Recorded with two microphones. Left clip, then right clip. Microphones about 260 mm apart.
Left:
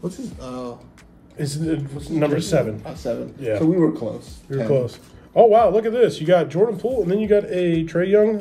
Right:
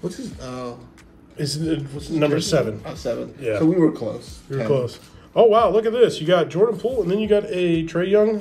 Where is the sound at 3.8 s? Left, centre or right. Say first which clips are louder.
Right 1 dB; right.